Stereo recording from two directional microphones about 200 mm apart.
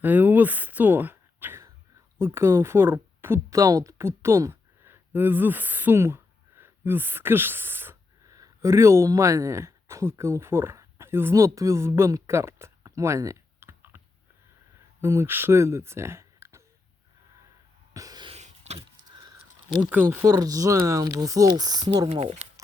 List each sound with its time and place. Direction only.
0.0 s speech: 10° right (ahead or behind)
15.0 s speech: 15° right (ahead or behind)
17.9 s a sound: 20° right (ahead or behind)
19.8 s speech: 10° right (ahead or behind)
22.1 s speech: 30° right (ahead or behind)